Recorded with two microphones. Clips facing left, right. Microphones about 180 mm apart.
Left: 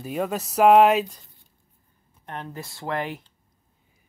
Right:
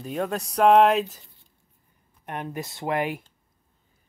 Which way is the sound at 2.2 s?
15° right (ahead or behind).